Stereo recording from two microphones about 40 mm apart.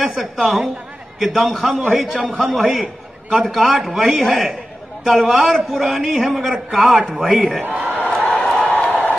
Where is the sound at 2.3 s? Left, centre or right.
Right.